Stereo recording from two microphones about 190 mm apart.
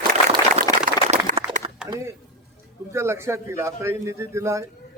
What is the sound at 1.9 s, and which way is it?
A man's voice, 15° right (ahead or behind).